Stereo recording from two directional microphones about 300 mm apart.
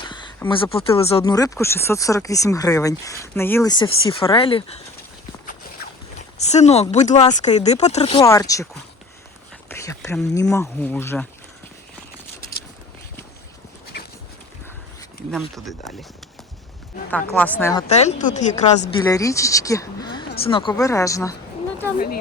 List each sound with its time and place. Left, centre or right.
0.0 s speech: centre
5.5 s a sound: left
7.3 s speech: left
8.2 s speech: centre
9.6 s speech: centre
15.3 s speech: centre
17.1 s speech: centre
17.8 s speech: left
19.0 s speech: centre
21.9 s speech: left